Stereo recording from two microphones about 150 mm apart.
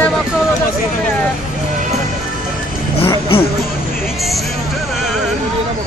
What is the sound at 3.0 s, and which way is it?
Speech, 35° left (ahead or behind).